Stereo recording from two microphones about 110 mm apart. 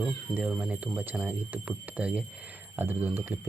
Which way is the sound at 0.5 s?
10° right (ahead or behind).